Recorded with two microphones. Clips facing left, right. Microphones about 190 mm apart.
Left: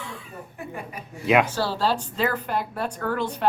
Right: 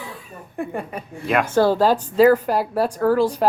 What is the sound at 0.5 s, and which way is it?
A woman's voice, 50° right (ahead or behind).